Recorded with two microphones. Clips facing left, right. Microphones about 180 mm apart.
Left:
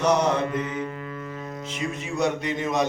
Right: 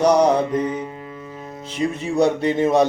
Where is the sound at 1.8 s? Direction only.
30° right (ahead or behind).